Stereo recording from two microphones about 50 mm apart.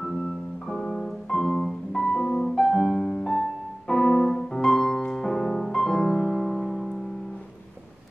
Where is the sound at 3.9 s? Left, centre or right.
Centre.